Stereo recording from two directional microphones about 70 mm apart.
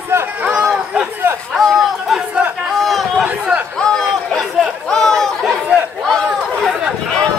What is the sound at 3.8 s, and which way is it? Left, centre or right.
Chatter, centre.